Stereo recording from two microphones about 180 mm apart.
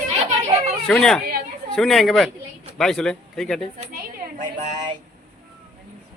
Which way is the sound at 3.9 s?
45° right (ahead or behind).